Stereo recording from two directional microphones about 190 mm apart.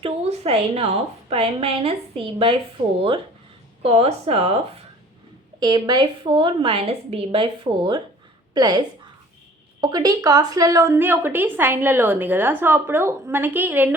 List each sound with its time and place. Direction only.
0.0 s a woman's voice: 30° right (ahead or behind)
3.8 s a woman's voice: 30° right (ahead or behind)
9.8 s a woman's voice: 20° right (ahead or behind)